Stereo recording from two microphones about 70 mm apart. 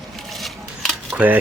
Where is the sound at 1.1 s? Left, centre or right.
Right.